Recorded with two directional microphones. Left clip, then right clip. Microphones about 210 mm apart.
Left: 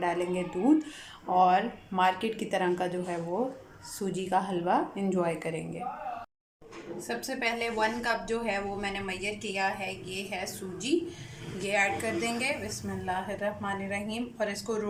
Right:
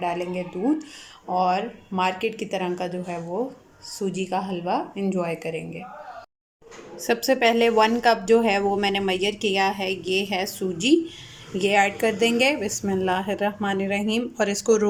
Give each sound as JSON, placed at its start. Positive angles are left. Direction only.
{"t": 0.0, "sound": "speech", "side_deg": -5}
{"t": 7.1, "sound": "a woman's voice", "side_deg": -40}